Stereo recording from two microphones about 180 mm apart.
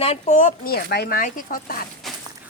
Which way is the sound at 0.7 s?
65° left (ahead or behind).